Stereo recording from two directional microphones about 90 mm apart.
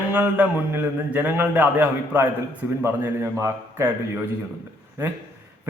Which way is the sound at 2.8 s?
30° right (ahead or behind).